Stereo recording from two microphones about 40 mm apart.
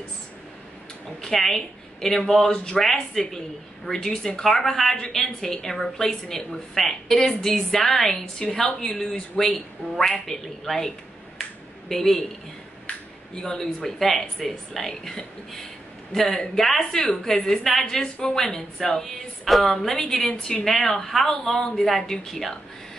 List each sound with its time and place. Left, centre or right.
1.2 s a woman's voice: centre
2.4 s a woman's voice: centre
11.9 s a woman's voice: centre
13.3 s a woman's voice: centre
17.8 s a woman's voice: centre